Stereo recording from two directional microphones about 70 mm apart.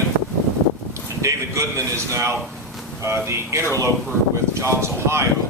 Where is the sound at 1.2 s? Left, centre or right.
Right.